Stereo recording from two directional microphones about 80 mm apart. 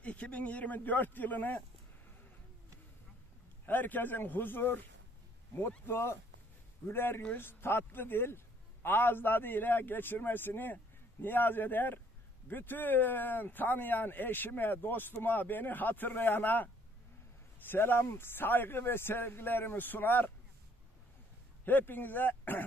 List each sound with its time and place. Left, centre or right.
0.0 s speech: centre
3.6 s speech: left
5.9 s speech: left
21.6 s speech: left